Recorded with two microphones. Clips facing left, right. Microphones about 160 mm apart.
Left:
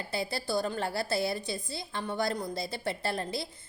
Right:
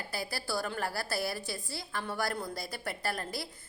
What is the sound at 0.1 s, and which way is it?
A woman's voice, 25° left (ahead or behind).